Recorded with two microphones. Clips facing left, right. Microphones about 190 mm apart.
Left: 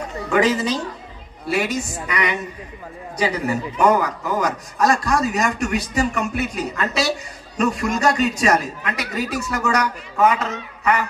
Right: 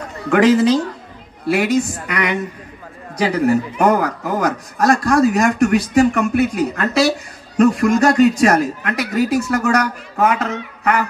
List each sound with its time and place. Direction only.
0.3 s a man's voice: 60° right (ahead or behind)
2.0 s a man's voice: 60° right (ahead or behind)